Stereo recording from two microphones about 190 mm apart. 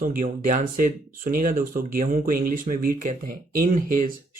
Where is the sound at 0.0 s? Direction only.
45° right (ahead or behind).